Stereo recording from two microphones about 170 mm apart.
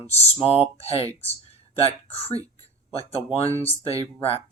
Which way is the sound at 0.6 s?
35° left (ahead or behind).